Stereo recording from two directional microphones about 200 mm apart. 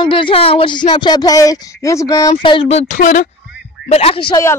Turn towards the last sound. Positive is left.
turn(degrees=25)  # may be behind; listen again after turning